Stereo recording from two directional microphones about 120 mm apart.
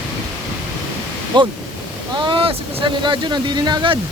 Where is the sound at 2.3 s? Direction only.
45° right (ahead or behind).